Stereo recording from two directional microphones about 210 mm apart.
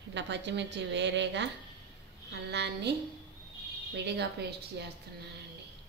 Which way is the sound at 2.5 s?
55° right (ahead or behind).